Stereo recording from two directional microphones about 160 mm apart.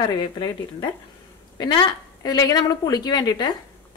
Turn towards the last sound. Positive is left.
turn(degrees=25)  # may be behind; listen again after turning